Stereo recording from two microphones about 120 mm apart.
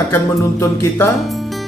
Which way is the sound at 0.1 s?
20° left (ahead or behind).